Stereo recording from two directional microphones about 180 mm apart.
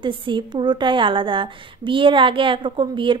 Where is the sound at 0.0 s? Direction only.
25° right (ahead or behind).